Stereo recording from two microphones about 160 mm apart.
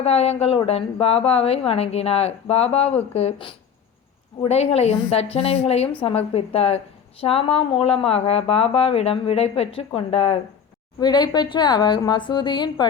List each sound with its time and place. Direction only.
0.0 s a woman's voice: 40° left (ahead or behind)
11.0 s a woman's voice: 25° left (ahead or behind)